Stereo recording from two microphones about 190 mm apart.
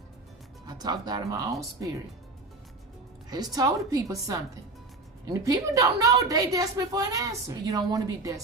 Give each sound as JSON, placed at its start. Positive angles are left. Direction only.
{"t": 0.7, "sound": "speech", "side_deg": -20}
{"t": 3.2, "sound": "a woman's voice", "side_deg": -20}